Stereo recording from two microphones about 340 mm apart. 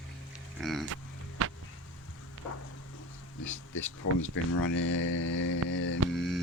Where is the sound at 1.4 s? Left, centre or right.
Right.